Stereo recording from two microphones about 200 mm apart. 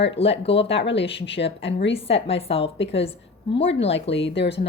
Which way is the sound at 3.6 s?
65° left (ahead or behind).